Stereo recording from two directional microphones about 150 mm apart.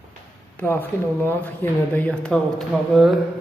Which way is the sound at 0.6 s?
15° left (ahead or behind).